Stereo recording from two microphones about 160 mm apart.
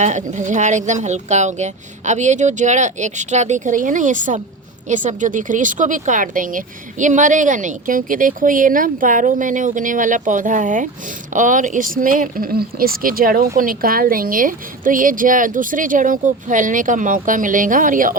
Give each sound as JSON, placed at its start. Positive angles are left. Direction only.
{"t": 0.0, "sound": "a woman's voice", "side_deg": -50}